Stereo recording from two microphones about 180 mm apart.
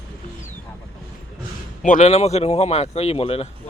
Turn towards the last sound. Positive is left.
turn(degrees=35)  # may be behind; listen again after turning